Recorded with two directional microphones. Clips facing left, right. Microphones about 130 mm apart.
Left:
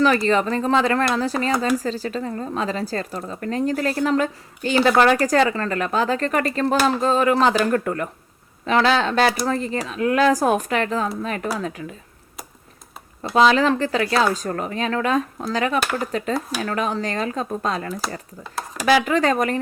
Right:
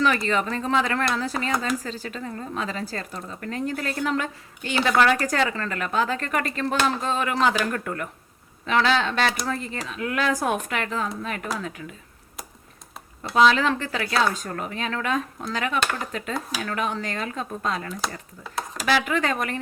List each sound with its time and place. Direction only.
0.0 s speech: 35° left (ahead or behind)
13.3 s speech: 35° left (ahead or behind)
18.4 s speech: centre (ahead or behind)
19.0 s speech: 35° left (ahead or behind)